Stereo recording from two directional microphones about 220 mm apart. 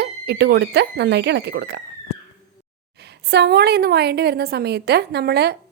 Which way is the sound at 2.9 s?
50° right (ahead or behind).